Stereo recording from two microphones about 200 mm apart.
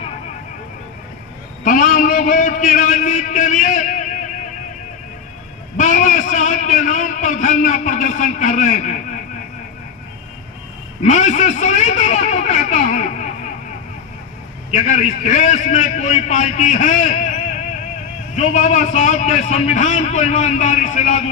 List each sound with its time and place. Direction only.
1.6 s a man's voice: 40° left (ahead or behind)
5.7 s a man's voice: 40° left (ahead or behind)
11.0 s a man's voice: 35° left (ahead or behind)
14.7 s a man's voice: 40° left (ahead or behind)
18.3 s a man's voice: 35° left (ahead or behind)